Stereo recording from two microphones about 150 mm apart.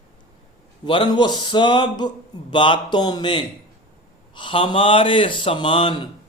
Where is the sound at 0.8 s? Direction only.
35° left (ahead or behind).